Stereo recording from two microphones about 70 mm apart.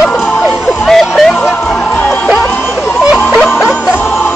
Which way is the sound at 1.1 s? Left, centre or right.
Centre.